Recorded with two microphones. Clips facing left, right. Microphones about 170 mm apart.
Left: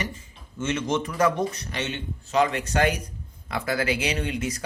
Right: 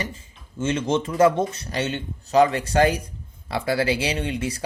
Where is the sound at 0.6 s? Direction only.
30° right (ahead or behind).